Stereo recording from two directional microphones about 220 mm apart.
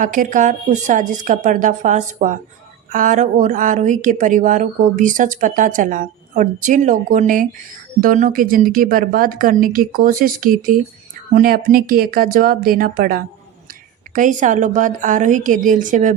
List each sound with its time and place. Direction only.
0.0 s speech: 35° right (ahead or behind)